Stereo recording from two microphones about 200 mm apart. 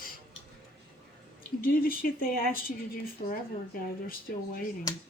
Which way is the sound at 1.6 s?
45° left (ahead or behind).